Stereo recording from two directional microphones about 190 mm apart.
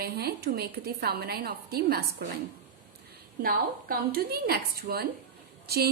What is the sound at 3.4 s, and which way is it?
A woman's voice, 50° right (ahead or behind).